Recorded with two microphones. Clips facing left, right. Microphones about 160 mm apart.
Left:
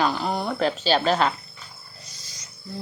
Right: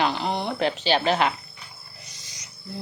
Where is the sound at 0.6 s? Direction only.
40° left (ahead or behind).